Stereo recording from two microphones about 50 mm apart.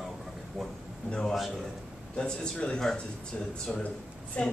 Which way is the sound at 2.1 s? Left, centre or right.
Centre.